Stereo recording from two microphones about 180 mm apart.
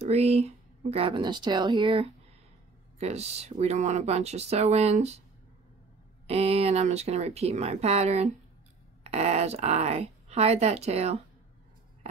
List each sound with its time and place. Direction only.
0.0 s speech: 35° right (ahead or behind)
6.2 s speech: 35° right (ahead or behind)